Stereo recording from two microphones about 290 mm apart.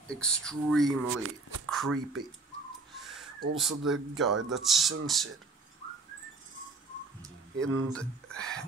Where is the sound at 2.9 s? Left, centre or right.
Centre.